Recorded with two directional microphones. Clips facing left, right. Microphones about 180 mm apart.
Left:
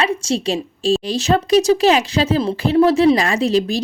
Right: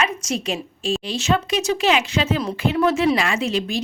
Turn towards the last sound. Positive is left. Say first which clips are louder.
# left 6 dB
turn(degrees=35)  # may be behind; listen again after turning